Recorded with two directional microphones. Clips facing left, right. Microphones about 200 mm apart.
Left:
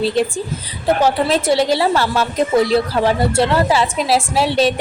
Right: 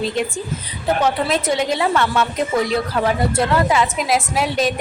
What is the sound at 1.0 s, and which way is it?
A woman's voice, 35° left (ahead or behind).